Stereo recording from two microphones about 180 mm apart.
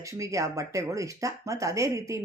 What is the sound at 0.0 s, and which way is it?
Speech, 15° right (ahead or behind).